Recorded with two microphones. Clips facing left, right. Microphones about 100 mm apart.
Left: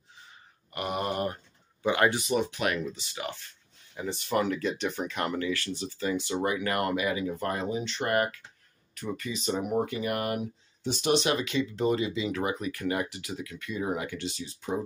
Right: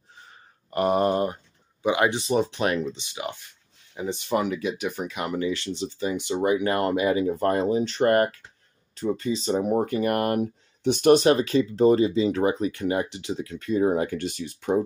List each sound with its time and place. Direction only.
0.7 s speech: 35° right (ahead or behind); by 5.4 s 5° right (ahead or behind)
5.4 s speech: 20° right (ahead or behind); by 8.4 s 40° right (ahead or behind)
8.9 s speech: 30° right (ahead or behind); by 10.5 s 45° right (ahead or behind)
10.8 s speech: 55° right (ahead or behind)